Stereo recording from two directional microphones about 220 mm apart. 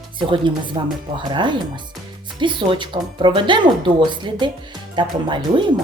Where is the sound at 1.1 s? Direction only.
20° right (ahead or behind).